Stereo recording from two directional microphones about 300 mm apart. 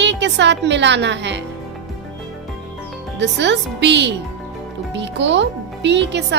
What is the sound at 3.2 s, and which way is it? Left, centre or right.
Speech, right.